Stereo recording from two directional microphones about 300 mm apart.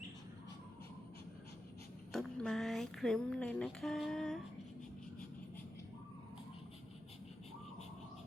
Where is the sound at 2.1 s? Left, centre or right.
Centre.